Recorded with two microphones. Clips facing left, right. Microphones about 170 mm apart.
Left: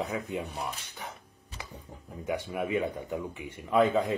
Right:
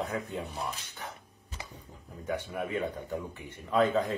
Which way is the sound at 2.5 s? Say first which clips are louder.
Left 3 dB; 15° left (ahead or behind).